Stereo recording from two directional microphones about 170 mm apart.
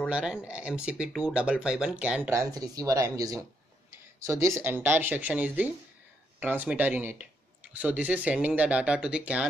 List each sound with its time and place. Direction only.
0.1 s speech: 5° right (ahead or behind)